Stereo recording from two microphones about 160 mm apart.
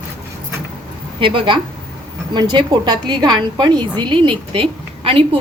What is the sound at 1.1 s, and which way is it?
A woman's voice, 30° right (ahead or behind).